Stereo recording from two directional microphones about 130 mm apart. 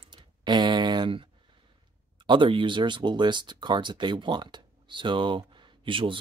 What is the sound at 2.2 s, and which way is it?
Speech, 40° right (ahead or behind).